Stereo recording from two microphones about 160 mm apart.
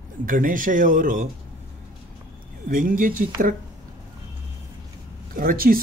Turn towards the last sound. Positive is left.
turn(degrees=-65)  # may be behind; listen again after turning